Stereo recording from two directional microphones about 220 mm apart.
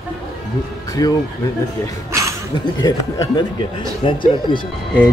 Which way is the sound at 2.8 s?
20° left (ahead or behind).